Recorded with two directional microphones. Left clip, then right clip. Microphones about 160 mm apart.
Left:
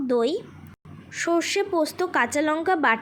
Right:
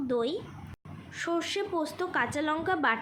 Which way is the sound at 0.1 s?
35° left (ahead or behind).